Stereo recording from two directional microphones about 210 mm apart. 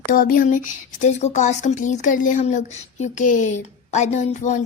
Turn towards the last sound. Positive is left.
turn(degrees=35)  # may be behind; listen again after turning